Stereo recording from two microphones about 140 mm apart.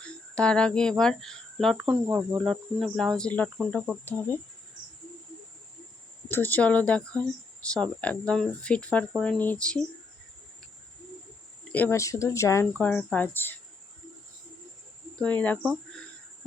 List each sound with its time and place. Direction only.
0.0 s speech: 5° left (ahead or behind)
6.2 s speech: 15° left (ahead or behind)
11.7 s speech: 15° left (ahead or behind)
13.0 s speech: 10° left (ahead or behind)
15.2 s speech: 10° left (ahead or behind)